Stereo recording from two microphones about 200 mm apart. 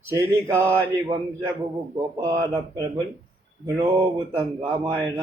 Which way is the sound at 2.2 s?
15° right (ahead or behind).